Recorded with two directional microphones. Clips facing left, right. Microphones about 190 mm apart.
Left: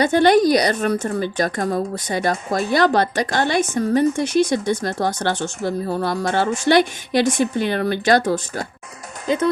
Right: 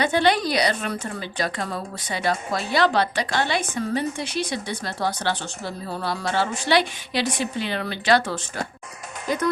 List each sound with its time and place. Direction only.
0.0 s a woman's voice: 45° left (ahead or behind)
9.2 s speech: 25° left (ahead or behind)